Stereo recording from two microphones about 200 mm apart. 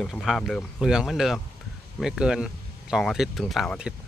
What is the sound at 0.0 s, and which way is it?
Speech, centre (ahead or behind).